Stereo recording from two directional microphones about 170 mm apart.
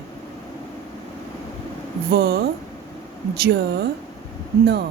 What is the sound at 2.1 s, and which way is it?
Speech, 70° right (ahead or behind).